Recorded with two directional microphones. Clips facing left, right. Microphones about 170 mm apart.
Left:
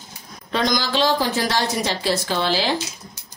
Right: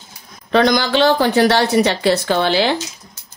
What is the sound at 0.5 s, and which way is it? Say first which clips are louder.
Speech: right 7 dB; 65° right (ahead or behind).